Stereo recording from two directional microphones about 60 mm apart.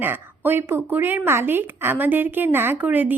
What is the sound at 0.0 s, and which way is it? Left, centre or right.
Speech, right.